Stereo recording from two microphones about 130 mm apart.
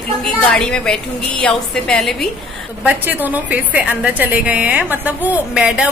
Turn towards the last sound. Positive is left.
turn(degrees=-10)  # may be behind; listen again after turning